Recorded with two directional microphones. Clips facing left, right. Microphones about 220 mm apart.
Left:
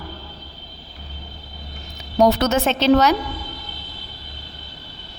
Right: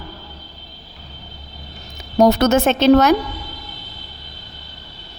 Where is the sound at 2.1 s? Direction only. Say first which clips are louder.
Right 3 dB; 45° right (ahead or behind).